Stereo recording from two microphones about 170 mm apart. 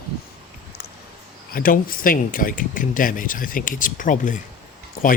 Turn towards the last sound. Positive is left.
turn(degrees=55)  # may be behind; listen again after turning